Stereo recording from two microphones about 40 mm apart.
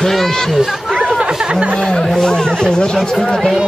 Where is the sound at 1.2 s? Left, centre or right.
Right.